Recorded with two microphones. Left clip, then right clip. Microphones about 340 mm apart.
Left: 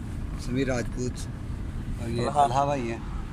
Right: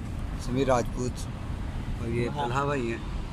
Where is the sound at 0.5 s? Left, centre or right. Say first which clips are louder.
Right 4 dB; right.